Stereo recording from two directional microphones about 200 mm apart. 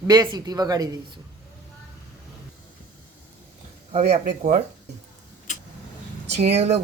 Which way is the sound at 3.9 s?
35° right (ahead or behind).